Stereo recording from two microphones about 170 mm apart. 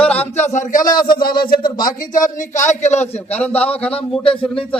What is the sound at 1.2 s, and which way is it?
Speech, 60° left (ahead or behind).